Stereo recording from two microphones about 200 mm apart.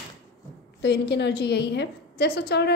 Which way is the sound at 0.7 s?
60° left (ahead or behind).